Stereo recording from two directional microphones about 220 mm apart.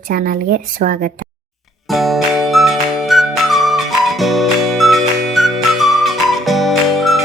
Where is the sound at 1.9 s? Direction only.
Centre (ahead or behind).